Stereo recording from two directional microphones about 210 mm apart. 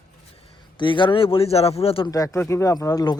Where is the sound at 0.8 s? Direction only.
25° left (ahead or behind).